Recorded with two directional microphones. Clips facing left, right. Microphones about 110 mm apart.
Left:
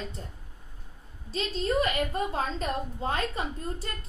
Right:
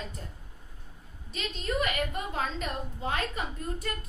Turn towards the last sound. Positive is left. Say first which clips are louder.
# left 1 dB
turn(degrees=30)  # may be behind; listen again after turning